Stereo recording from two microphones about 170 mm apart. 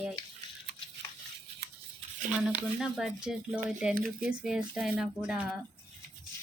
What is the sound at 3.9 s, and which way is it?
Speech, 60° right (ahead or behind).